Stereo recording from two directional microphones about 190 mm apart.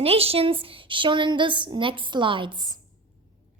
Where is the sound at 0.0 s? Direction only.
30° right (ahead or behind).